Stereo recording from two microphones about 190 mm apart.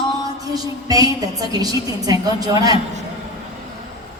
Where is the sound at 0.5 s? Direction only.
20° right (ahead or behind).